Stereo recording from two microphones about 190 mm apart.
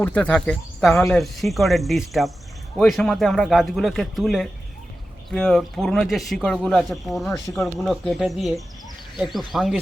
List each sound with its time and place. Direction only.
0.0 s speech: 5° left (ahead or behind)